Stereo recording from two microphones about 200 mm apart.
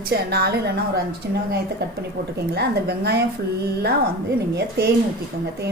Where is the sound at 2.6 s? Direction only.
55° right (ahead or behind).